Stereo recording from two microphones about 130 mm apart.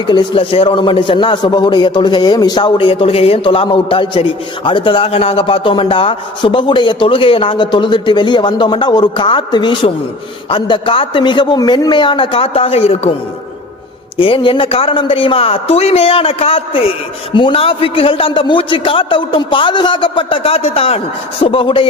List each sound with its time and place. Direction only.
0.1 s a man's voice: 40° left (ahead or behind)
14.2 s a man's voice: 40° left (ahead or behind)